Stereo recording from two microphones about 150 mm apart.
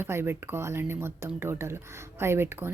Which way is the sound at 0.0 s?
15° right (ahead or behind).